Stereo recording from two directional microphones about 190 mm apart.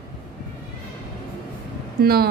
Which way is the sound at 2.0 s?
55° right (ahead or behind).